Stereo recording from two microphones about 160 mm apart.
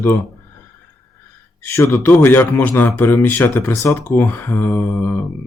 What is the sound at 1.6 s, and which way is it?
Speech, 15° left (ahead or behind).